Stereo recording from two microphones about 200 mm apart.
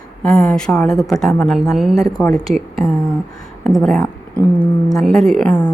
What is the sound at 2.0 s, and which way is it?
Speech, 15° left (ahead or behind).